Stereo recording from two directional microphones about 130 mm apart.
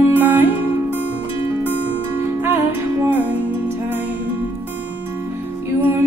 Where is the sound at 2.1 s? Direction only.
15° right (ahead or behind).